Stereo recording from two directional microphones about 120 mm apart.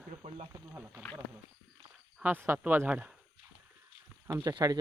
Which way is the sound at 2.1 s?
15° right (ahead or behind).